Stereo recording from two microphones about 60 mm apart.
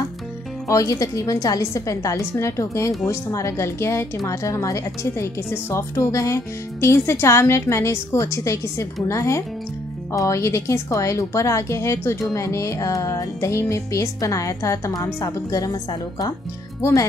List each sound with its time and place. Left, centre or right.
0.7 s music: left
3.1 s speech: left
4.3 s music: left
5.5 s speech: left
9.0 s music: left
15.0 s a woman's voice: left